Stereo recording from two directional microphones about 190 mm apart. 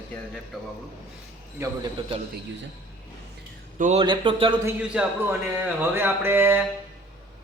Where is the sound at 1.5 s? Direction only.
15° right (ahead or behind).